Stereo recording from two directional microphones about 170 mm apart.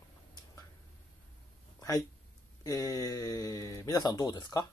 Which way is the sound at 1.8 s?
20° left (ahead or behind).